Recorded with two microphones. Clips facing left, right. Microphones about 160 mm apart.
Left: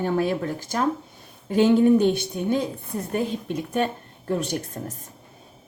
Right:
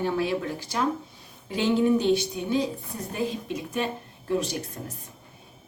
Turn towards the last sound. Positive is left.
turn(degrees=50)  # may be behind; listen again after turning